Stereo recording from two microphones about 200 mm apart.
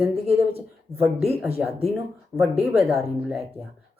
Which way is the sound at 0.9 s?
30° right (ahead or behind).